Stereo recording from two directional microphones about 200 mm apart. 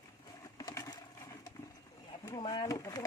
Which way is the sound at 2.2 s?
20° left (ahead or behind).